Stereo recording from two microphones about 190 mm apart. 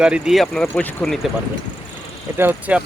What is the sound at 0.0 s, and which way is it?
Speech, 5° right (ahead or behind).